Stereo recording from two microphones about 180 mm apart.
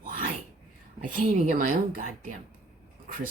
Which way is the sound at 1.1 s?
50° right (ahead or behind).